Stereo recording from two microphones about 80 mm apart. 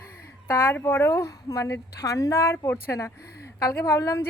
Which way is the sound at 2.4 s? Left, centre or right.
Left.